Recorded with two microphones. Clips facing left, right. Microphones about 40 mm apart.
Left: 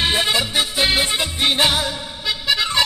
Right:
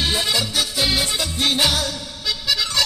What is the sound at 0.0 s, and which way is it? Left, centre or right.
Music, left.